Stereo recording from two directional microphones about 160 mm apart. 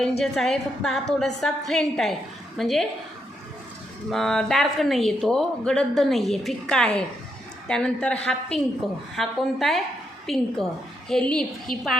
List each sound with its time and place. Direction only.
0.2 s a woman's voice: centre (ahead or behind)
4.1 s a woman's voice: centre (ahead or behind)